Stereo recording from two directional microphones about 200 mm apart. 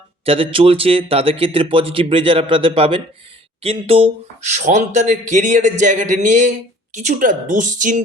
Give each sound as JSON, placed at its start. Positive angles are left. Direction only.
{"t": 0.5, "sound": "speech", "side_deg": -30}